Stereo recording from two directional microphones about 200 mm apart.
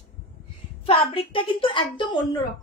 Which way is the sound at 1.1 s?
25° left (ahead or behind).